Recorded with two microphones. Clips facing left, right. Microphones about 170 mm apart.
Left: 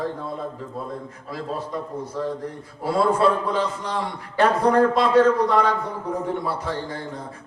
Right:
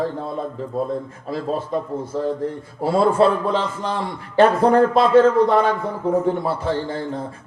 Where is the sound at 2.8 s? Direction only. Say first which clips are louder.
Right 3 dB; 25° right (ahead or behind).